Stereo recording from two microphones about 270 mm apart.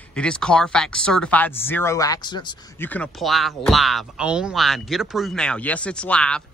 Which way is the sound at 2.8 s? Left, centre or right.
Centre.